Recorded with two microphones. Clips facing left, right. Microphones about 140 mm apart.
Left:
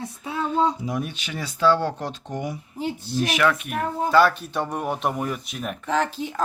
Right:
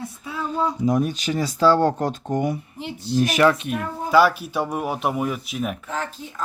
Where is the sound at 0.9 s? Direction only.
40° right (ahead or behind).